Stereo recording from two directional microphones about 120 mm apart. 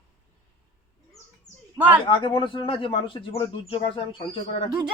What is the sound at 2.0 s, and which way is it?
Speech, 45° left (ahead or behind).